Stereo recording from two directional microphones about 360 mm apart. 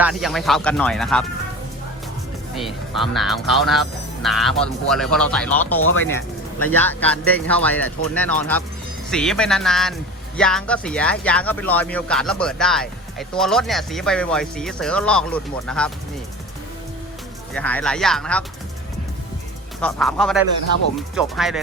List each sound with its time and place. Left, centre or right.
0.0 s speech: centre
2.6 s speech: centre
5.8 s speech: left
6.7 s speech: centre
17.5 s speech: centre
19.8 s speech: centre